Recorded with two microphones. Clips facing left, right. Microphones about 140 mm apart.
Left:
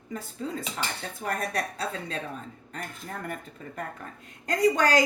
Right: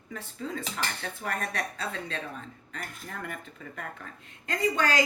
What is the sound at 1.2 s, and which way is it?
Speech, 40° left (ahead or behind).